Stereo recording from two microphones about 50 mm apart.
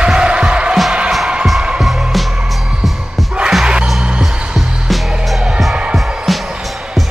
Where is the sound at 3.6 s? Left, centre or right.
Centre.